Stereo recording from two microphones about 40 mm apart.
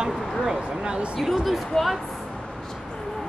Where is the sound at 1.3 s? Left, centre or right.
Centre.